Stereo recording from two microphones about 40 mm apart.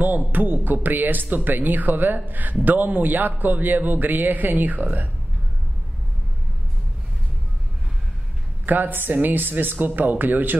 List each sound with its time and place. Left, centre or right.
0.3 s a man's voice: right
8.6 s a man's voice: right